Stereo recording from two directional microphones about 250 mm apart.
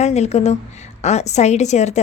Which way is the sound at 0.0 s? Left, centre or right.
Left.